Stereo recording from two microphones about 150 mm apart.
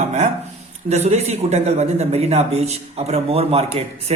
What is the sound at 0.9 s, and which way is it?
Speech, 50° right (ahead or behind).